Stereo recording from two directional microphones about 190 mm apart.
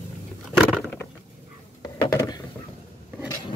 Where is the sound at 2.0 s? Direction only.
15° left (ahead or behind).